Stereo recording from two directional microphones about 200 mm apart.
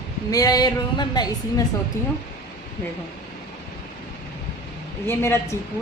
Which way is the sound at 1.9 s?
15° left (ahead or behind).